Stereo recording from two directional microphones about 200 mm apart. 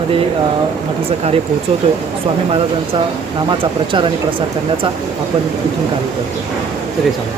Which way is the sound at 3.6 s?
25° right (ahead or behind).